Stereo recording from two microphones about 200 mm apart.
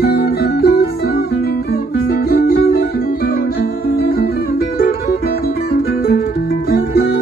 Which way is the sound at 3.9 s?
50° left (ahead or behind).